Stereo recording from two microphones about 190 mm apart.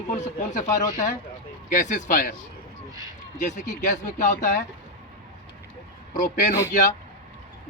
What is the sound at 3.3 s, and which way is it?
Speech, 40° left (ahead or behind).